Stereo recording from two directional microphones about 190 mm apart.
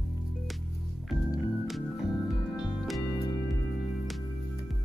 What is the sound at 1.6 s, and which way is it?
Music, centre (ahead or behind).